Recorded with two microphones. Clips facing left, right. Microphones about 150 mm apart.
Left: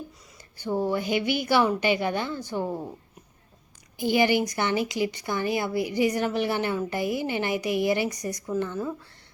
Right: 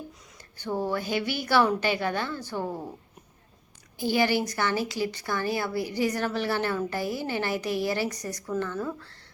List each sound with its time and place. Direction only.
0.6 s speech: 15° left (ahead or behind)
3.9 s speech: 15° left (ahead or behind)